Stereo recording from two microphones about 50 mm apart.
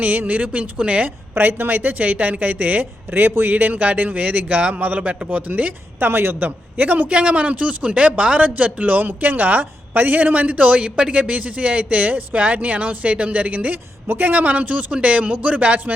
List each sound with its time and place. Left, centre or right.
0.0 s a woman's voice: right
6.0 s a man's voice: right